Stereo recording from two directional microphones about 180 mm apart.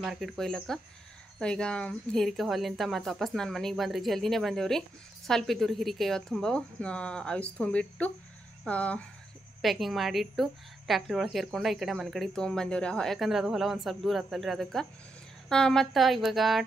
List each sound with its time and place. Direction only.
0.0 s a woman's voice: centre (ahead or behind)